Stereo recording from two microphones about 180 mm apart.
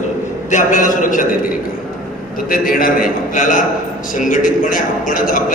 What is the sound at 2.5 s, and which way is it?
A man's voice, 50° left (ahead or behind).